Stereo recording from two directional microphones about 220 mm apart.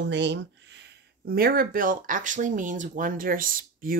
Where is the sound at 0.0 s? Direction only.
55° right (ahead or behind).